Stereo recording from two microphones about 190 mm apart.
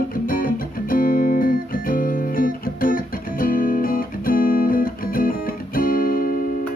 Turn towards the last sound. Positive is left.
turn(degrees=50)  # may be behind; listen again after turning